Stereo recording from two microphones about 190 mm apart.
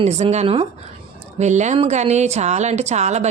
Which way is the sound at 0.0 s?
35° right (ahead or behind).